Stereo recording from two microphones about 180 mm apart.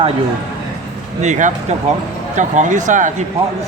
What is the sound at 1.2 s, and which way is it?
Speech, 40° right (ahead or behind).